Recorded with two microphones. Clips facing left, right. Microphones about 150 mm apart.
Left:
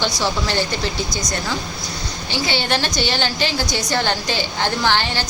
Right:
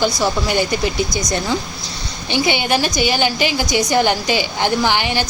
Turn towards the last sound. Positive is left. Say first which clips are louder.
# right 2 dB
turn(degrees=-15)  # may be behind; listen again after turning